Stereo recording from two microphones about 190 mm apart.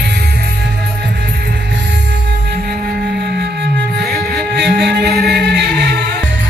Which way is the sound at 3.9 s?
55° right (ahead or behind).